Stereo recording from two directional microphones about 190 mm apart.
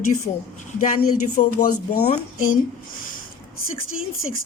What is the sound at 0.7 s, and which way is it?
A woman's voice, 45° left (ahead or behind).